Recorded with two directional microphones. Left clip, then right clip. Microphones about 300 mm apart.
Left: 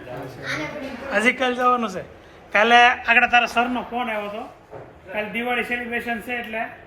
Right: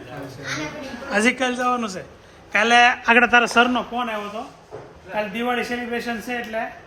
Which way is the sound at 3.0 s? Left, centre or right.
Right.